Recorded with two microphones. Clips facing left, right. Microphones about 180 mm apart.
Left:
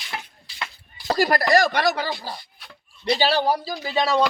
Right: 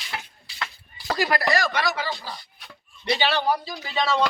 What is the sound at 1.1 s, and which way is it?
Speech, 40° left (ahead or behind).